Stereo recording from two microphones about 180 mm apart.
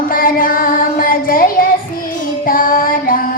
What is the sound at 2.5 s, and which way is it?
Music, 50° left (ahead or behind).